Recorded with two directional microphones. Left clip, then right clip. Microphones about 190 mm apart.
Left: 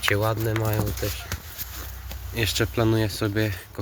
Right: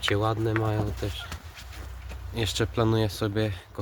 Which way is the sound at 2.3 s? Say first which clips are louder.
Left 3 dB; 15° right (ahead or behind).